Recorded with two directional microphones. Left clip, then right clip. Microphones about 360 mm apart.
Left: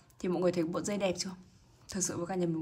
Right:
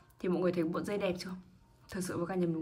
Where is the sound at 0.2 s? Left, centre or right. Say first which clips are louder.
Left 1 dB; centre.